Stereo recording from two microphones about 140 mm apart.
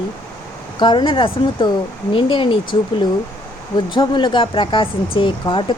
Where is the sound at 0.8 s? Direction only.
35° left (ahead or behind).